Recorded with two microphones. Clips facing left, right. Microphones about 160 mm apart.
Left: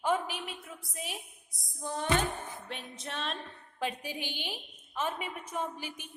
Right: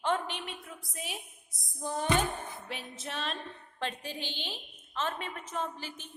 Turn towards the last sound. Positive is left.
turn(degrees=10)  # may be behind; listen again after turning